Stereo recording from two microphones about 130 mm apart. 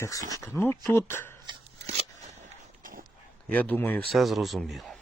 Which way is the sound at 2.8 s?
90° right.